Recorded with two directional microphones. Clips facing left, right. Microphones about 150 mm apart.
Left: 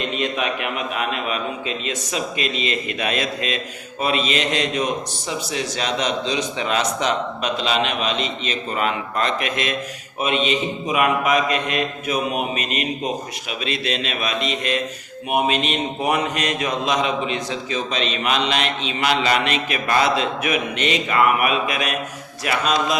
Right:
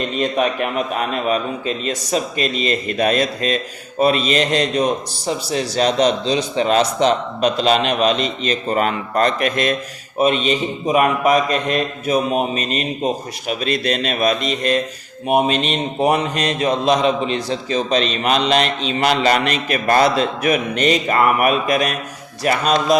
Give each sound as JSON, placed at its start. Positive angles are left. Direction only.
{"t": 0.0, "sound": "mantra", "side_deg": -40}
{"t": 13.5, "sound": "speech", "side_deg": -45}
{"t": 15.3, "sound": "mantra", "side_deg": -35}